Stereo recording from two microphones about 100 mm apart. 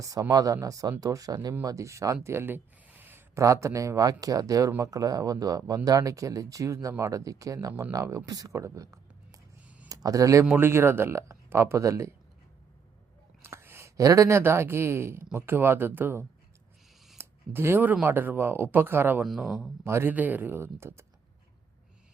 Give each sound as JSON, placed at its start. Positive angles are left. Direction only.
{"t": 0.0, "sound": "speech", "side_deg": -35}
{"t": 13.4, "sound": "speech", "side_deg": -25}
{"t": 17.2, "sound": "a sound", "side_deg": -25}
{"t": 18.0, "sound": "speech", "side_deg": -20}
{"t": 19.2, "sound": "speech", "side_deg": 0}
{"t": 19.8, "sound": "speech", "side_deg": -25}